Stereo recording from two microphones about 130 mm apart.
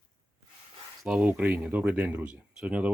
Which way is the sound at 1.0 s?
10° right (ahead or behind).